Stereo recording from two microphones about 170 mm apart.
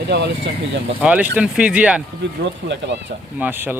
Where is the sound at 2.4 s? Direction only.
90° right.